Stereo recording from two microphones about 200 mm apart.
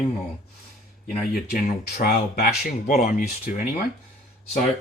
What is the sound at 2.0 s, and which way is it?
Speech, 50° left (ahead or behind).